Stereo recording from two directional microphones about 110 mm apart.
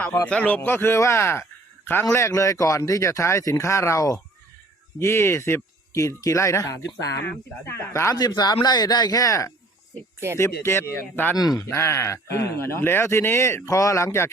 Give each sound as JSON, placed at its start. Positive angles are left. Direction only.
{"t": 0.3, "sound": "speech", "side_deg": 10}
{"t": 8.1, "sound": "speech", "side_deg": 40}
{"t": 11.3, "sound": "speech", "side_deg": 35}
{"t": 11.7, "sound": "speech", "side_deg": 25}